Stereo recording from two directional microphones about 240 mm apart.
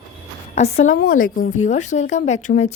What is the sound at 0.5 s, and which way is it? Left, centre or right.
A woman's voice, left.